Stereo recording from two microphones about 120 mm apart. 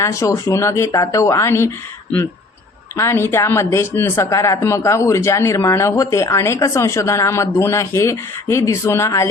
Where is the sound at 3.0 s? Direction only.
20° left (ahead or behind).